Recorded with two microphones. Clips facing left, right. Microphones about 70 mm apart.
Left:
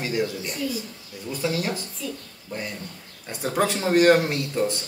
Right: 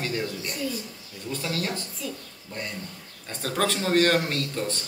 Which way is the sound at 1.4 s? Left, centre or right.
Centre.